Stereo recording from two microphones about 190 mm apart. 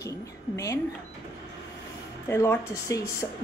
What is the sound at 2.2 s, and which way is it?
A woman's voice, 15° left (ahead or behind).